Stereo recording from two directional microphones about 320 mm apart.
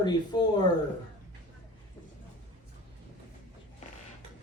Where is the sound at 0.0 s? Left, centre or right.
Centre.